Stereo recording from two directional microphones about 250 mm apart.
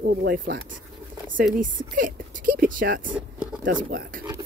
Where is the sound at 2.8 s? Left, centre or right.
Right.